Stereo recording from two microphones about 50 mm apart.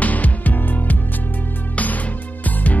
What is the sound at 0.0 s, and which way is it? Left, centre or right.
Music, left.